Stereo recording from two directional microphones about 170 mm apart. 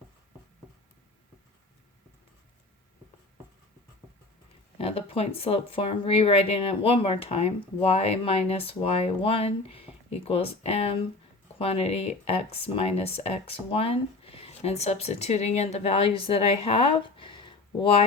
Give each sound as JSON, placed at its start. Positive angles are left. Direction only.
{"t": 4.8, "sound": "speech", "side_deg": 35}